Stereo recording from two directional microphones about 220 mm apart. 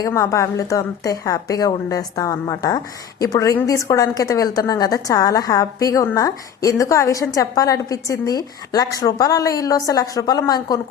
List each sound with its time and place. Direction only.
0.0 s a woman's voice: 15° left (ahead or behind)